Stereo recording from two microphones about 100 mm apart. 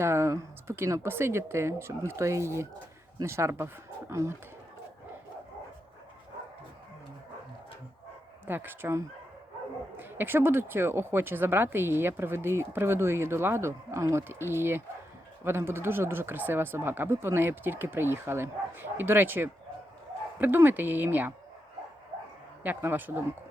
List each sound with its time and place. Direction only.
0.0 s speech: 30° right (ahead or behind)
8.4 s speech: 20° right (ahead or behind)
22.6 s speech: 20° right (ahead or behind)